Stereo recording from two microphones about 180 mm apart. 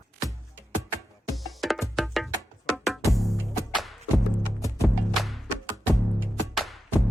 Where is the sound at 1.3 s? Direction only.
Centre (ahead or behind).